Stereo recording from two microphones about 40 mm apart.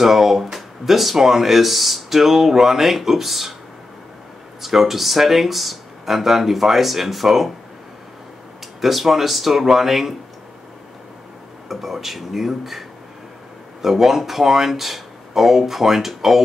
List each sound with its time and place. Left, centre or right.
0.0 s speech: centre
4.6 s speech: centre
8.8 s speech: centre
11.7 s speech: centre
13.8 s speech: centre